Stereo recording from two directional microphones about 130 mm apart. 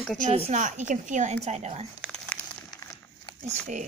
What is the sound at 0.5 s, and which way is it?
A woman's voice, 70° right (ahead or behind).